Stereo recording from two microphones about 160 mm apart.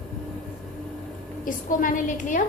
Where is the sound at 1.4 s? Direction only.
55° left (ahead or behind).